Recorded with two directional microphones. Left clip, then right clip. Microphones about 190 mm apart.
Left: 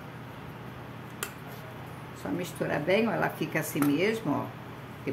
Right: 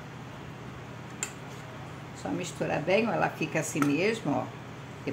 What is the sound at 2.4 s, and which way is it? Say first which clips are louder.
A woman's voice: even; 10° right (ahead or behind).